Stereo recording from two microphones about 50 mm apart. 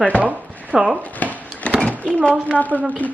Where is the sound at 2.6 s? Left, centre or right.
Left.